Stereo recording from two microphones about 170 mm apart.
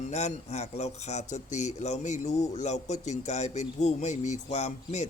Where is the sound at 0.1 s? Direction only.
40° left (ahead or behind).